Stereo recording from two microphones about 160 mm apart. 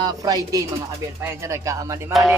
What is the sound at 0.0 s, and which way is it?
Speech, 25° right (ahead or behind).